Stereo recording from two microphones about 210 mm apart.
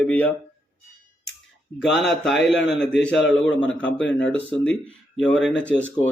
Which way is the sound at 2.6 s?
55° left (ahead or behind).